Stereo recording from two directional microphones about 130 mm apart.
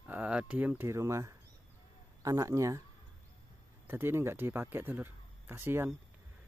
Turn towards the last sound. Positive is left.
turn(degrees=-20)  # may be behind; listen again after turning